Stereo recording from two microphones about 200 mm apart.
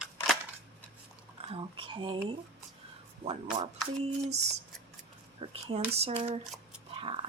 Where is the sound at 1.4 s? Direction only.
25° right (ahead or behind).